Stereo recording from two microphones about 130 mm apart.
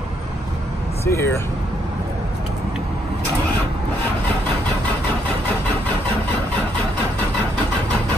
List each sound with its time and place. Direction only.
1.0 s speech: 20° left (ahead or behind)